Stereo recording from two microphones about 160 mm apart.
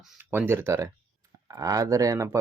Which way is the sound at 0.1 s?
10° right (ahead or behind).